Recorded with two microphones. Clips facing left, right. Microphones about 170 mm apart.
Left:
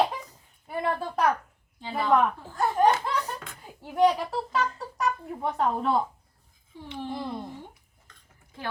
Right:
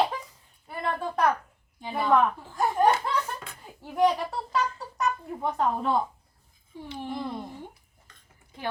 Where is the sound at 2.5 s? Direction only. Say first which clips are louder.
Left 1 dB; 10° right (ahead or behind).